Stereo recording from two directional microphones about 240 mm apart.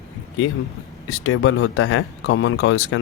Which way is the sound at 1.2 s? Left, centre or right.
Left.